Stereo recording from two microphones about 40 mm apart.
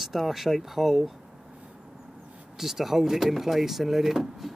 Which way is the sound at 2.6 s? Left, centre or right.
Centre.